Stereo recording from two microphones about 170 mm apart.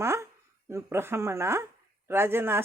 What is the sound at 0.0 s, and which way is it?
Speech, 15° right (ahead or behind).